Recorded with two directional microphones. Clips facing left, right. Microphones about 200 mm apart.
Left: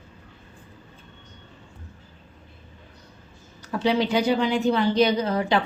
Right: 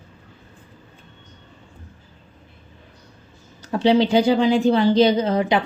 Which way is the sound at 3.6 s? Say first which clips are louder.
Right 6 dB; 30° right (ahead or behind).